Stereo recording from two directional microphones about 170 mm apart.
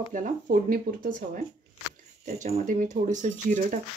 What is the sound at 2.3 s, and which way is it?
Speech, 40° right (ahead or behind).